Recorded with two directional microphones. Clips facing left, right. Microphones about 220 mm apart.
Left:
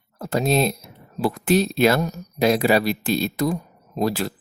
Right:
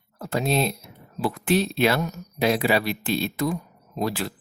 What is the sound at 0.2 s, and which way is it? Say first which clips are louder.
Speech: left 3 dB; 40° left (ahead or behind).